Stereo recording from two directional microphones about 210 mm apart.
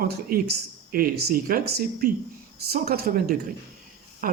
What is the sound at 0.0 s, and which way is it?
Speech, 45° right (ahead or behind).